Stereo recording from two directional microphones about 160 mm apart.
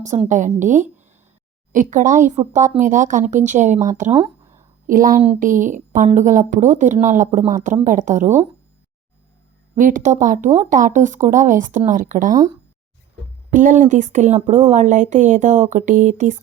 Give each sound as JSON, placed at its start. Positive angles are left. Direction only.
{"t": 0.0, "sound": "speech", "side_deg": -50}
{"t": 9.7, "sound": "speech", "side_deg": -55}
{"t": 13.5, "sound": "speech", "side_deg": -50}